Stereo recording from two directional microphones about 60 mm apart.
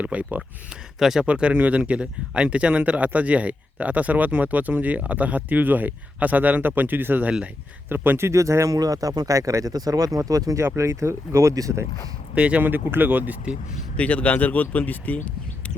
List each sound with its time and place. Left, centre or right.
0.0 s speech: right
0.9 s speech: centre
1.3 s speech: centre; by 8.3 s right
8.3 s speech: right
10.6 s speech: right
12.3 s speech: right
13.9 s speech: left